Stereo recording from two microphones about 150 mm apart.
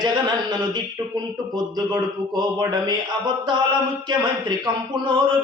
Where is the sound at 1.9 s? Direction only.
25° right (ahead or behind).